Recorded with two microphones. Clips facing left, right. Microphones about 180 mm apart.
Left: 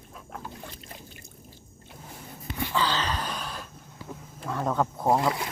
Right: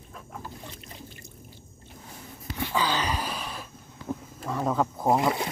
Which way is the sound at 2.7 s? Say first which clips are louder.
Right 1 dB; 10° right (ahead or behind).